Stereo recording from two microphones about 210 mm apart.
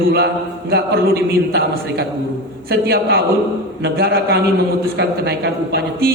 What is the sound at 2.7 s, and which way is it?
A man's voice, 50° right (ahead or behind).